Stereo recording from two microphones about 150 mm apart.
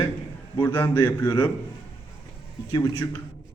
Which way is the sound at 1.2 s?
30° left (ahead or behind).